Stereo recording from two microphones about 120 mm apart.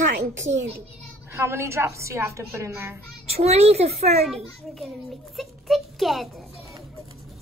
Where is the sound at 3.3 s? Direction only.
60° right (ahead or behind).